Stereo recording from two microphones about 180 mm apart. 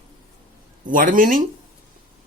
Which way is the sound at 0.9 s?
50° right (ahead or behind).